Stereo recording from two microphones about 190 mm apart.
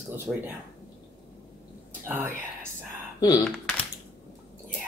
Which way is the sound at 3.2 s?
20° left (ahead or behind).